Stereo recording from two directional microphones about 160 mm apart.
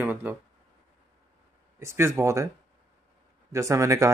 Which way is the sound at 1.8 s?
15° right (ahead or behind).